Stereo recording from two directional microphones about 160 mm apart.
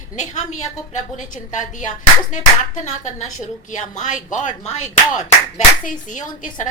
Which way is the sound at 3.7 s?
50° left (ahead or behind).